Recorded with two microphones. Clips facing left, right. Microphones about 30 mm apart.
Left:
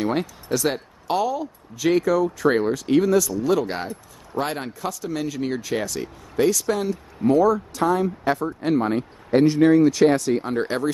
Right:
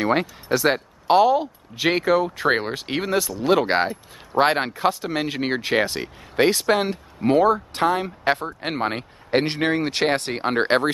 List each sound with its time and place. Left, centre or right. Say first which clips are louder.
0.0 s speech: right 3 dB; right